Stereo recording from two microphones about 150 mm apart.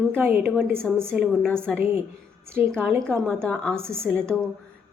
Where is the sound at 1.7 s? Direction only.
15° right (ahead or behind).